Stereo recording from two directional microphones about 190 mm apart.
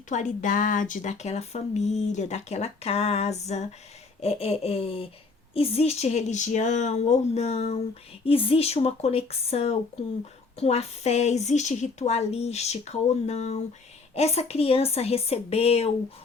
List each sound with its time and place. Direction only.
0.1 s speech: 40° left (ahead or behind)